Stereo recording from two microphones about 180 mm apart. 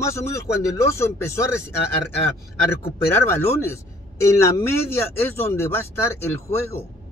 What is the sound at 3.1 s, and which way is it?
Speech, 15° left (ahead or behind).